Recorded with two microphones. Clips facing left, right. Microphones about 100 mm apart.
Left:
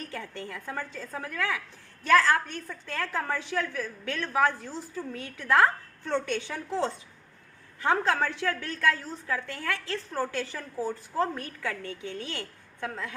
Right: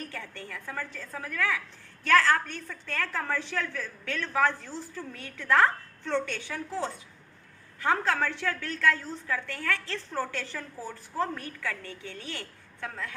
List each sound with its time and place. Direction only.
0.0 s a woman's voice: 20° left (ahead or behind)